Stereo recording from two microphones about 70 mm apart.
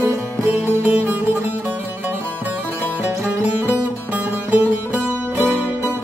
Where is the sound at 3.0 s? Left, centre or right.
Right.